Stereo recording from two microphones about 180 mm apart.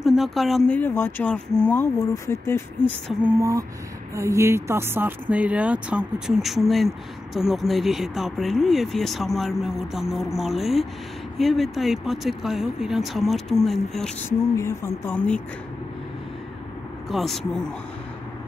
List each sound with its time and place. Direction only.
0.0 s speech: centre (ahead or behind); by 2.9 s 15° left (ahead or behind)
3.3 s speech: 15° right (ahead or behind); by 14.1 s centre (ahead or behind)
14.5 s speech: 15° left (ahead or behind)
17.1 s speech: centre (ahead or behind)